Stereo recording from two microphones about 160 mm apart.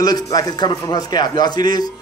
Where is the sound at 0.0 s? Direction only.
25° left (ahead or behind).